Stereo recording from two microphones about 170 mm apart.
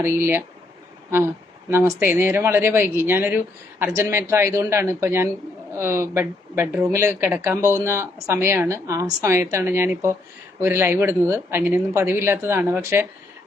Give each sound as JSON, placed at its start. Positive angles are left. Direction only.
{"t": 0.0, "sound": "speech", "side_deg": -15}
{"t": 1.7, "sound": "speech", "side_deg": -10}